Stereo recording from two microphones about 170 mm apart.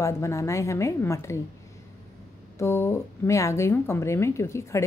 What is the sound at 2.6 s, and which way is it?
A woman's voice, 15° left (ahead or behind).